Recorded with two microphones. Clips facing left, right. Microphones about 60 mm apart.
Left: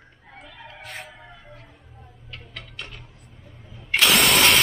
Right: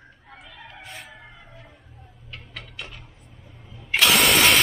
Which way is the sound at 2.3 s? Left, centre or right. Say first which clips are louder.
Even; centre.